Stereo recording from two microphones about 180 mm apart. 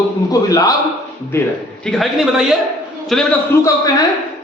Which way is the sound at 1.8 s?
Centre (ahead or behind).